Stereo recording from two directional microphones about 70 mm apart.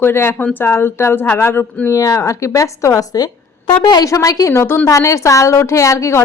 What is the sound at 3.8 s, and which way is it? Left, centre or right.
Speech, left.